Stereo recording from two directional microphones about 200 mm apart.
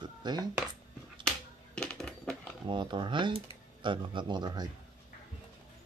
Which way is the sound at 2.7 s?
25° right (ahead or behind).